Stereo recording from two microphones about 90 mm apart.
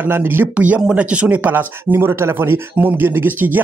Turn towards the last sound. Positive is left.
turn(degrees=-20)  # may be behind; listen again after turning